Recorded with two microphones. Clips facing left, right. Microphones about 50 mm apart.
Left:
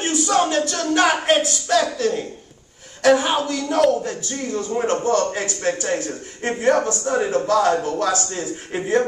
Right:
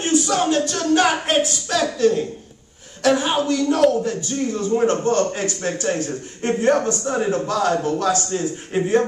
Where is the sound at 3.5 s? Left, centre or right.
Centre.